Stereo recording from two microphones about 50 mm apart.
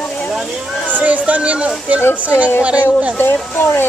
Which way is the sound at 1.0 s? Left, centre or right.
Right.